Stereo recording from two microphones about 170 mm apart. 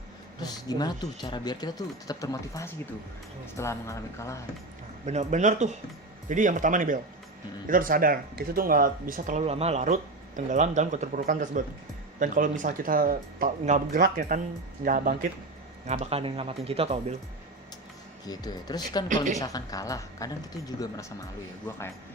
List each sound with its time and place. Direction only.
0.3 s speech: 25° left (ahead or behind)
5.0 s speech: 45° right (ahead or behind)
9.4 s speech: 35° right (ahead or behind)
11.2 s speech: 55° right (ahead or behind)
15.9 s speech: 35° right (ahead or behind)
18.3 s speech: 25° left (ahead or behind)
19.0 s speech: 50° right (ahead or behind)
19.4 s speech: 20° left (ahead or behind)